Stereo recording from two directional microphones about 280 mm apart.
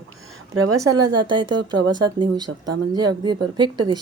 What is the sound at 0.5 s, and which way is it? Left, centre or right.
Speech, right.